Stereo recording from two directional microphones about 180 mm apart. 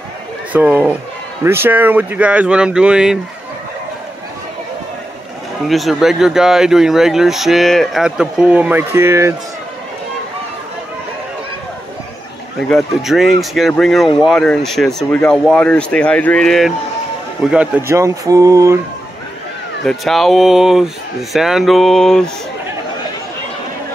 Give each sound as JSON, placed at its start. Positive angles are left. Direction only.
{"t": 0.5, "sound": "speech", "side_deg": -10}
{"t": 5.7, "sound": "speech", "side_deg": 0}
{"t": 12.6, "sound": "speech", "side_deg": 0}
{"t": 17.5, "sound": "speech", "side_deg": -10}
{"t": 19.8, "sound": "speech", "side_deg": 0}